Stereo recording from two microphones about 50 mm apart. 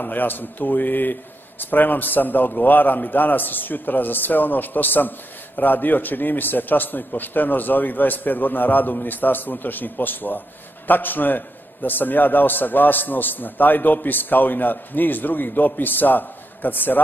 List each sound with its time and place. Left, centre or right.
0.0 s a man's voice: left